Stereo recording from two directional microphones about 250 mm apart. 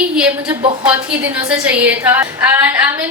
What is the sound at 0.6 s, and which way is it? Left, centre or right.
Speech, centre.